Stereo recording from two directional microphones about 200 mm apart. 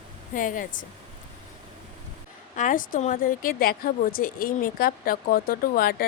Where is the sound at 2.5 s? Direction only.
40° left (ahead or behind).